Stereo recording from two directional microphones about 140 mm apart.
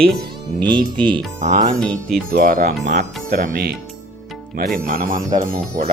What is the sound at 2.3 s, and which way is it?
Speech, 80° right.